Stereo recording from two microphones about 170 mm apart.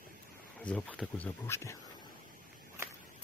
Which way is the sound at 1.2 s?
15° left (ahead or behind).